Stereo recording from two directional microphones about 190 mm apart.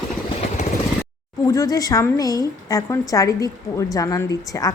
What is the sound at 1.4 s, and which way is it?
A woman's voice, 15° left (ahead or behind).